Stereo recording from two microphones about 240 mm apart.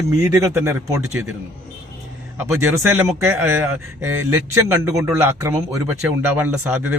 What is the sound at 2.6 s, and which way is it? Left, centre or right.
A man's voice, centre.